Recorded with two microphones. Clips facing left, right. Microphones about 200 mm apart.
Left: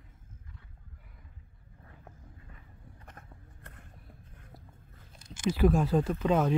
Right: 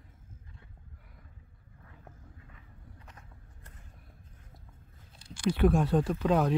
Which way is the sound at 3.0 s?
55° left (ahead or behind).